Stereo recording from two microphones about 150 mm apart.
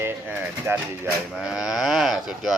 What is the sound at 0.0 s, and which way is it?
Speech, 15° right (ahead or behind).